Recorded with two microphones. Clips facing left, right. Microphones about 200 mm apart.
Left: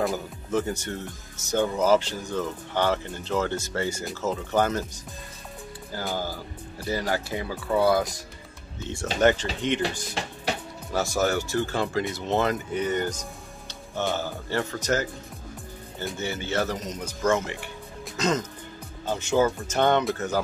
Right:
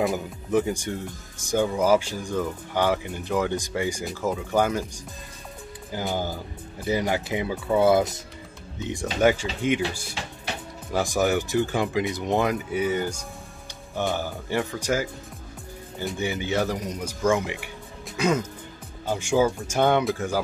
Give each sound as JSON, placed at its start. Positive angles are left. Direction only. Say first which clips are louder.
{"t": 0.1, "sound": "speech", "louder": "right 3 dB", "side_deg": -15}
{"t": 5.9, "sound": "speech", "louder": "right 3 dB", "side_deg": -15}
{"t": 16.2, "sound": "speech", "louder": "right 2 dB", "side_deg": -15}